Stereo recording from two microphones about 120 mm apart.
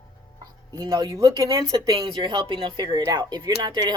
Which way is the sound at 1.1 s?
25° right (ahead or behind).